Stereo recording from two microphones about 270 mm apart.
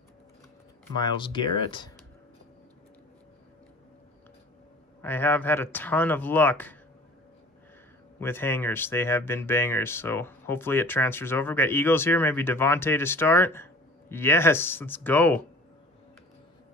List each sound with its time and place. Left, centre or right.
0.9 s speech: centre
5.0 s speech: centre
8.2 s speech: centre